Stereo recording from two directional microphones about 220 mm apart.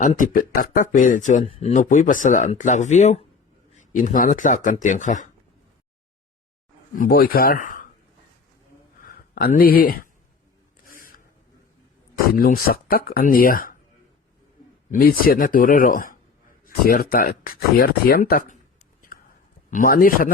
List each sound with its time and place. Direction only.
0.0 s speech: 35° left (ahead or behind)
6.9 s speech: 40° left (ahead or behind)
9.0 s speech: 40° left (ahead or behind)
10.9 s a sound: 40° left (ahead or behind)
12.3 s speech: 45° left (ahead or behind)
14.8 s speech: 40° left (ahead or behind)
19.7 s speech: 40° left (ahead or behind)